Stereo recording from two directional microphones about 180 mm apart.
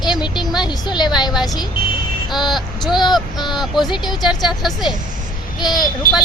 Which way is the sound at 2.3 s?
Centre (ahead or behind).